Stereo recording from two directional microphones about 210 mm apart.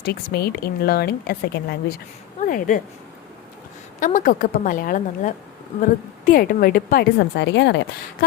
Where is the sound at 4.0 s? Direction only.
40° left (ahead or behind).